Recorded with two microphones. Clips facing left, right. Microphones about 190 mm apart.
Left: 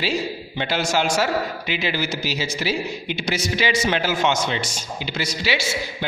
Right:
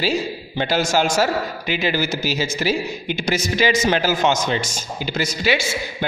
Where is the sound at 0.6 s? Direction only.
45° right (ahead or behind).